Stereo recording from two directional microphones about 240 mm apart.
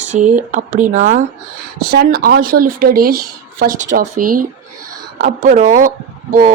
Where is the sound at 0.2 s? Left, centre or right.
Right.